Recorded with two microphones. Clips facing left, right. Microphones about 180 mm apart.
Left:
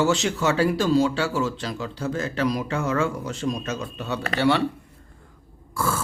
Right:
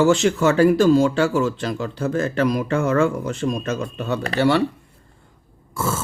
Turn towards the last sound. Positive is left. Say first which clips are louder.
# right 1 dB
turn(degrees=-25)  # may be behind; listen again after turning